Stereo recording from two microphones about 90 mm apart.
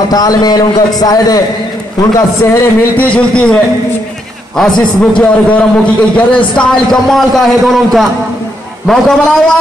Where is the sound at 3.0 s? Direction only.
15° left (ahead or behind).